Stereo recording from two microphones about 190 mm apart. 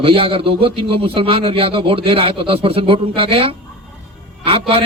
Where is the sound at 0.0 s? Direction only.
30° right (ahead or behind).